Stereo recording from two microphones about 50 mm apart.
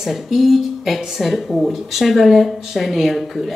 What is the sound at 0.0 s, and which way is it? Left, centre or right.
Speech, centre.